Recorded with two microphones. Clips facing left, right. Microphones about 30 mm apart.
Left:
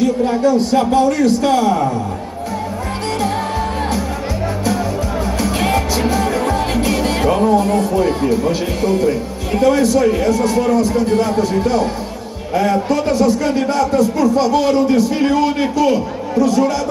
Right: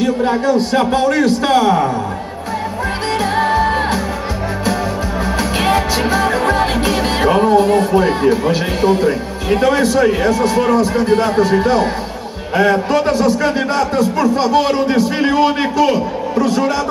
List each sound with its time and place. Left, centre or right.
0.0 s a man's voice: right
3.3 s music: right
5.2 s music: right
12.5 s a man's voice: right